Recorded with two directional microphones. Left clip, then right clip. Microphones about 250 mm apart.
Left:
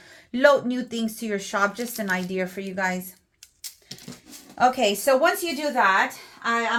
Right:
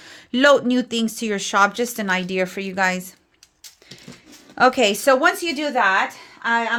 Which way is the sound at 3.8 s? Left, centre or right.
Right.